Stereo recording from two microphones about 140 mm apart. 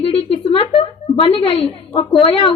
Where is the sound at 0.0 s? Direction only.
45° left (ahead or behind).